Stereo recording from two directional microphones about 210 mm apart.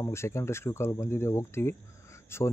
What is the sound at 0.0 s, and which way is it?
Speech, 15° left (ahead or behind).